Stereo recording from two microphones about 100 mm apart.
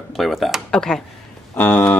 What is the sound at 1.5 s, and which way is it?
Speech, 15° left (ahead or behind).